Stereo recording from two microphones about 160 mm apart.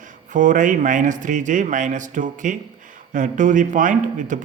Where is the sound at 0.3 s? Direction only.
50° right (ahead or behind).